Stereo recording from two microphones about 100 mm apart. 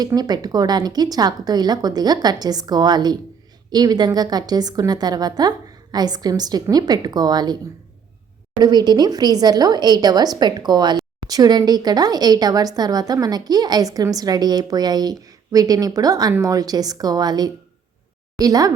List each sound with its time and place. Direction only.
0.0 s a woman's voice: 40° right (ahead or behind)